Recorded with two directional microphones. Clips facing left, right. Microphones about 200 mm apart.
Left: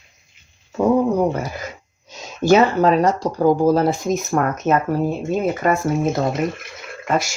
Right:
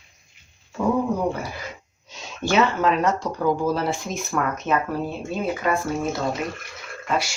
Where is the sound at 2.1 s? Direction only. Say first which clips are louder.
Left 10 dB; 40° left (ahead or behind).